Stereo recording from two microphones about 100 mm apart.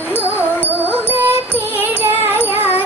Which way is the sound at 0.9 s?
20° right (ahead or behind).